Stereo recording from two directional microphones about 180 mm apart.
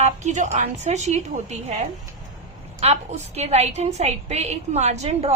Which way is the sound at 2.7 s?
35° right (ahead or behind).